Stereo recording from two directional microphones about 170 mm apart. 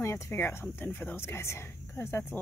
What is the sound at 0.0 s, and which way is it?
A woman's voice, 15° left (ahead or behind).